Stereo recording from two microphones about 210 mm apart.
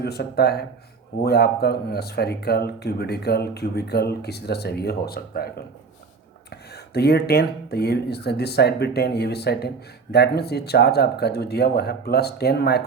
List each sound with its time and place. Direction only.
0.0 s speech: 50° left (ahead or behind)